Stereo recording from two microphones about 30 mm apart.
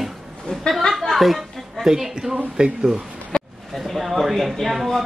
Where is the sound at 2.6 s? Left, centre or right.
Right.